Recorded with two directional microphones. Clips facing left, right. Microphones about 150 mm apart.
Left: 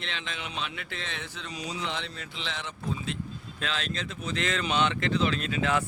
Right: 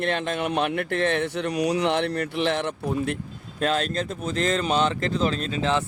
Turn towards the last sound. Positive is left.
turn(degrees=-30)  # may be behind; listen again after turning